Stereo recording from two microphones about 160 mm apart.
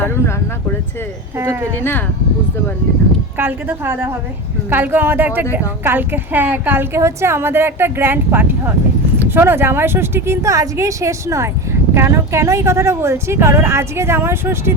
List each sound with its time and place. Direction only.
1.8 s speech: 15° left (ahead or behind)
3.3 s speech: 15° right (ahead or behind)